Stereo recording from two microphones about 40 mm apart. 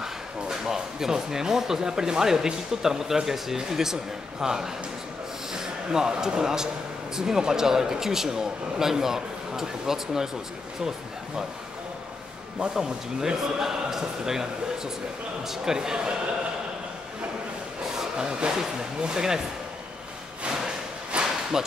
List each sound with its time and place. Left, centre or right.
0.0 s speech: centre
12.7 s speech: centre
17.9 s speech: centre
20.4 s a sound: right